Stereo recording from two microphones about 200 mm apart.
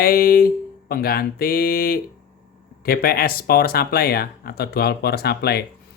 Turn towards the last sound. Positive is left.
turn(degrees=55)  # may be behind; listen again after turning